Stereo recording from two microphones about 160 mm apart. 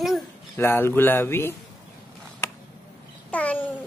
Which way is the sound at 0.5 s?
15° left (ahead or behind).